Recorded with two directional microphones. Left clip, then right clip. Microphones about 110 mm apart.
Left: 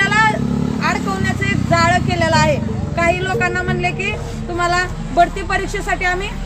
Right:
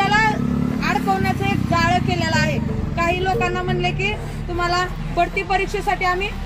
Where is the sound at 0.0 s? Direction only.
35° left (ahead or behind).